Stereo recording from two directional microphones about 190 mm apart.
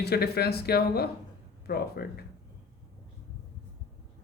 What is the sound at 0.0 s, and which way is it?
Speech, 55° left (ahead or behind).